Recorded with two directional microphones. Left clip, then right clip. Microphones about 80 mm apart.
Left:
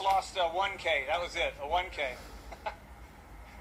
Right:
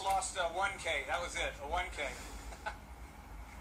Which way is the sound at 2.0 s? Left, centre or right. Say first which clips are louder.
Left 5 dB; right.